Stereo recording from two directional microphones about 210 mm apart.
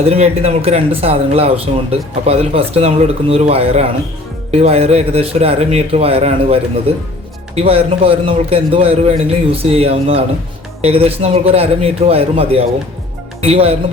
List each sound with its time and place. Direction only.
0.0 s speech: 30° right (ahead or behind)